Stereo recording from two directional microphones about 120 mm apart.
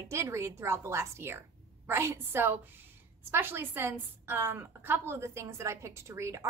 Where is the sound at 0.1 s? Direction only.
25° right (ahead or behind).